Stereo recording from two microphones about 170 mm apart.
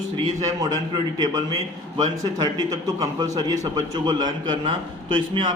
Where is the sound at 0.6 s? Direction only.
20° right (ahead or behind).